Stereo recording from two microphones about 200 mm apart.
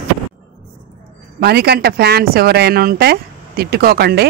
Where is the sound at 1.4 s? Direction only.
55° right (ahead or behind).